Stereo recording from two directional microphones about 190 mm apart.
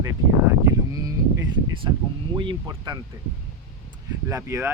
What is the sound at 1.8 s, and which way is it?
Speech, 25° right (ahead or behind).